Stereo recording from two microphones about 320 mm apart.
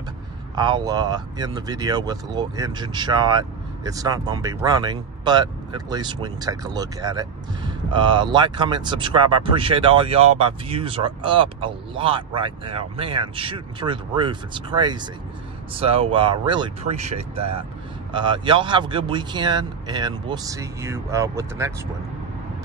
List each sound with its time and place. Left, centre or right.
0.6 s speech: centre